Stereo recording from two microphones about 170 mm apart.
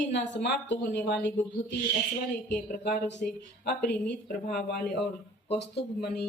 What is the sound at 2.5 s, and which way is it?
Speech, 65° left (ahead or behind).